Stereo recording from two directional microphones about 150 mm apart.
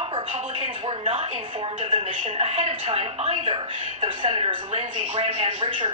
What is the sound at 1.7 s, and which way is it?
A woman's voice, 40° right (ahead or behind).